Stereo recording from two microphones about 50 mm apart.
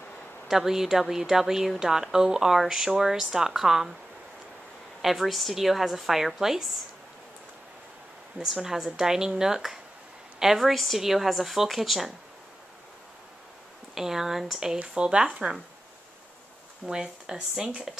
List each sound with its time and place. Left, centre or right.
0.5 s speech: centre
5.0 s a woman's voice: centre
8.4 s a woman's voice: centre
13.9 s speech: centre
16.8 s speech: centre